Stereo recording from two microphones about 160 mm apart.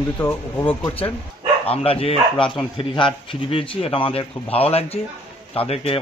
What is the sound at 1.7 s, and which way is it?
A man's voice, 35° left (ahead or behind).